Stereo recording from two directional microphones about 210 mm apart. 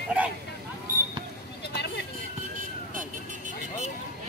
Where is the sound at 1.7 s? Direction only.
50° left (ahead or behind).